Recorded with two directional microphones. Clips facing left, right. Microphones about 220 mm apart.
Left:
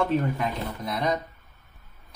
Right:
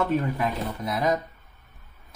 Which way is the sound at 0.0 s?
5° right (ahead or behind).